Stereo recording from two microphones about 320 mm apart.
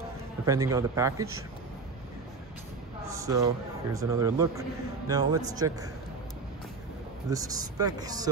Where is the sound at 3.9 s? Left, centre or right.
Centre.